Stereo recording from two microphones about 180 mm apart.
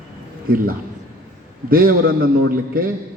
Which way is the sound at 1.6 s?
55° right (ahead or behind).